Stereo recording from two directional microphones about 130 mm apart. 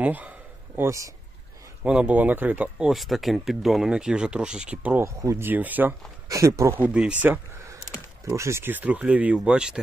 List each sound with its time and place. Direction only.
0.0 s a sound: 10° right (ahead or behind)
1.8 s speech: 10° right (ahead or behind)
2.9 s speech: centre (ahead or behind)
5.0 s speech: 25° right (ahead or behind)
6.2 s speech: 25° right (ahead or behind)
8.3 s speech: 20° right (ahead or behind)